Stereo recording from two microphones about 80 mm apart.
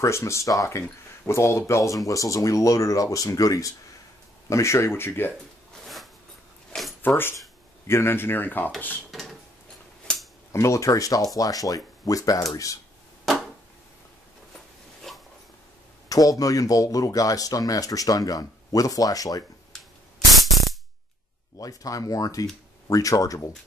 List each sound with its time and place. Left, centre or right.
0.0 s speech: left
6.7 s a sound: centre
7.0 s speech: left
9.1 s a sound: centre
10.5 s speech: left
15.1 s a sound: centre
16.1 s speech: left
20.2 s music: centre
21.5 s speech: left